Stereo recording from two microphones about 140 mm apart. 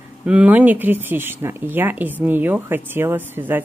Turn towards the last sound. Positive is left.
turn(degrees=-15)  # may be behind; listen again after turning